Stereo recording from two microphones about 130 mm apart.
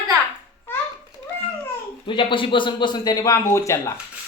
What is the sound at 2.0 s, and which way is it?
Speech, 40° left (ahead or behind).